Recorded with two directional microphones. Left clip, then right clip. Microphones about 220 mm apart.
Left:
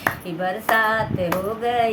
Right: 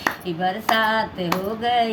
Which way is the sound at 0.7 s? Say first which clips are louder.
Left 2 dB; 15° left (ahead or behind).